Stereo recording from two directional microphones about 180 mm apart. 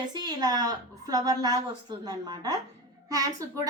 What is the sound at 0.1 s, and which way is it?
A woman's voice, 25° right (ahead or behind).